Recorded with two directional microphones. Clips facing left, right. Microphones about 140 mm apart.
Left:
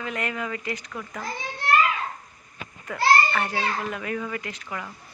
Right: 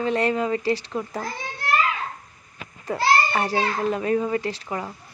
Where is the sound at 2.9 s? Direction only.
35° right (ahead or behind).